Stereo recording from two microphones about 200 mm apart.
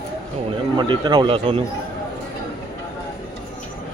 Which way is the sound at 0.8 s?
25° right (ahead or behind).